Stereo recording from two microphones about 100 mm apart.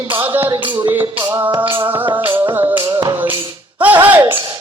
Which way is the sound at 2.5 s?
20° right (ahead or behind).